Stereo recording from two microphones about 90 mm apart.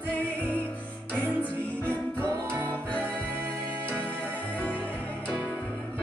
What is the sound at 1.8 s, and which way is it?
Music, 25° right (ahead or behind).